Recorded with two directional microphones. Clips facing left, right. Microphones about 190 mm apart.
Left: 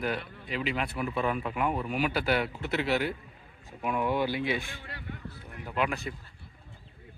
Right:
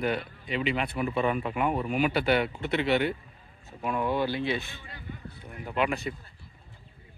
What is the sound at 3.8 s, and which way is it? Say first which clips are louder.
Speech: right 1 dB; 15° left (ahead or behind).